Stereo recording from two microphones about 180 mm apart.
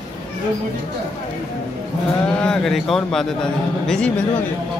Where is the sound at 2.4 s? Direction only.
5° left (ahead or behind).